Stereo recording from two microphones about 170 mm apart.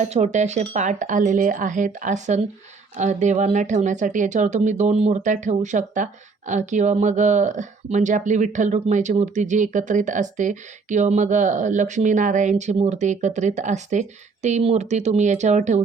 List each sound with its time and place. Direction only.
0.0 s speech: 40° right (ahead or behind)